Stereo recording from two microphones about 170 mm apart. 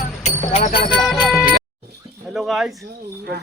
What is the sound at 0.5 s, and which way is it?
Speech, 35° left (ahead or behind).